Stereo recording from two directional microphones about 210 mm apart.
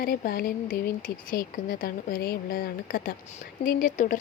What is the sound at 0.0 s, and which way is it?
Speech, 45° left (ahead or behind).